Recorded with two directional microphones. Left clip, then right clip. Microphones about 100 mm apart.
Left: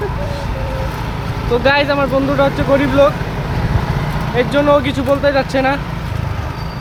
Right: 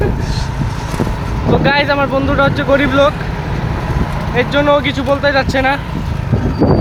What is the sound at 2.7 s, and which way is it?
Speech, 25° right (ahead or behind).